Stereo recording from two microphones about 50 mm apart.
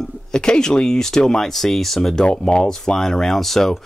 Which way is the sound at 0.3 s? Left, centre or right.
Centre.